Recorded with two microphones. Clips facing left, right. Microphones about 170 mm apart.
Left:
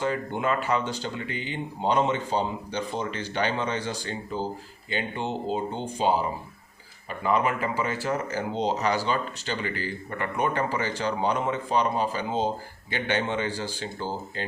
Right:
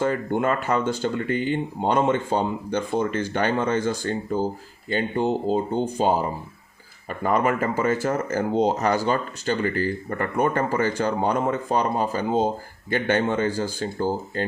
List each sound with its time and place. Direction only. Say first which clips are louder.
0.0 s speech: right 5 dB; 50° right (ahead or behind)